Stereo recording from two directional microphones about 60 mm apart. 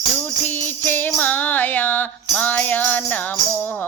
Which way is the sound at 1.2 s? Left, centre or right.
Left.